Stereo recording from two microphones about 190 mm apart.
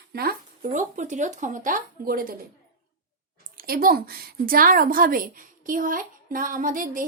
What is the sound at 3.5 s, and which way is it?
A woman's voice, 50° right (ahead or behind).